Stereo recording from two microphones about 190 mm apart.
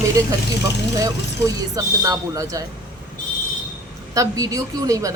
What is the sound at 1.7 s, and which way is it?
Speech, 20° right (ahead or behind).